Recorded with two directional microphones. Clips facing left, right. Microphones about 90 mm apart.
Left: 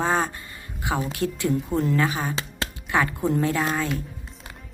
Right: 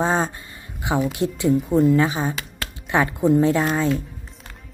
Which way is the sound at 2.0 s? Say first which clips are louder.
Right 3 dB; 25° right (ahead or behind).